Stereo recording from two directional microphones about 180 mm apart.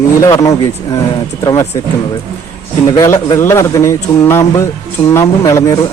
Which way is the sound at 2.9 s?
15° left (ahead or behind).